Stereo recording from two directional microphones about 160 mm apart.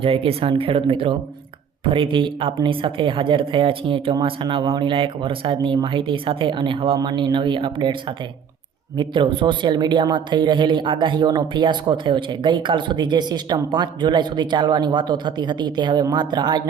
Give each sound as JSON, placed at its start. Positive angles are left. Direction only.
{"t": 0.0, "sound": "speech", "side_deg": -35}